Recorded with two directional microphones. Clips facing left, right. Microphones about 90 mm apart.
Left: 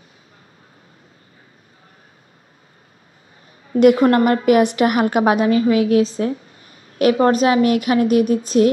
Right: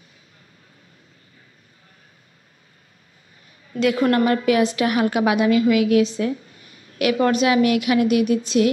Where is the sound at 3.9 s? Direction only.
35° left (ahead or behind).